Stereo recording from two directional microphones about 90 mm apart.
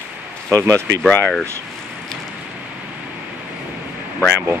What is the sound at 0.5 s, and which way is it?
Speech, 35° right (ahead or behind).